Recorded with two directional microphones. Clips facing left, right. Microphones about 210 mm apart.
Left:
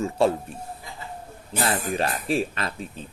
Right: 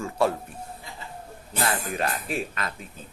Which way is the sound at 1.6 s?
30° left (ahead or behind).